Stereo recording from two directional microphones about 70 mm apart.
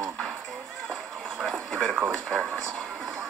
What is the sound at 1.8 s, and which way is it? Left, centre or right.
Speech, right.